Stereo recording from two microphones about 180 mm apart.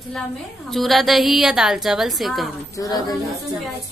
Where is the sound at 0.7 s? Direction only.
Centre (ahead or behind).